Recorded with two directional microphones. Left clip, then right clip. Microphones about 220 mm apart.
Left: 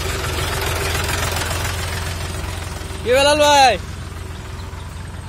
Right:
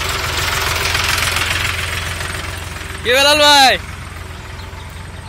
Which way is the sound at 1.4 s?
15° left (ahead or behind).